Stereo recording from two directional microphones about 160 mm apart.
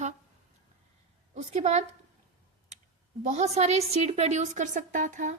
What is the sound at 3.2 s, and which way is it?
A woman's voice, 45° right (ahead or behind).